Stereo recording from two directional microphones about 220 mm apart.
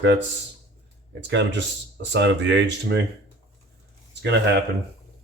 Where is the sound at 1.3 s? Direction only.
55° right (ahead or behind).